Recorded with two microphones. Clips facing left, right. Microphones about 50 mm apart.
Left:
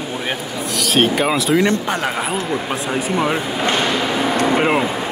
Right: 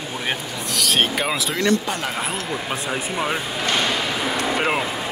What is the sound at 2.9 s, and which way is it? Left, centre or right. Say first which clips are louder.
Speech: left 6 dB; centre.